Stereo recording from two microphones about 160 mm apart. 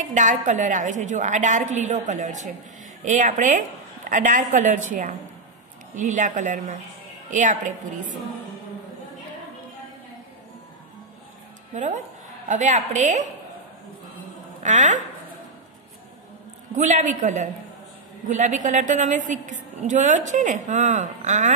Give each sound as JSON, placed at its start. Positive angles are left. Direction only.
{"t": 0.1, "sound": "a woman's voice", "side_deg": -50}
{"t": 11.7, "sound": "a woman's voice", "side_deg": -50}
{"t": 14.6, "sound": "a woman's voice", "side_deg": -50}
{"t": 16.7, "sound": "a woman's voice", "side_deg": -50}